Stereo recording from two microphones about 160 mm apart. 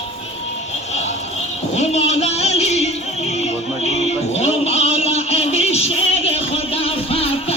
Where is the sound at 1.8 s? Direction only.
40° left (ahead or behind).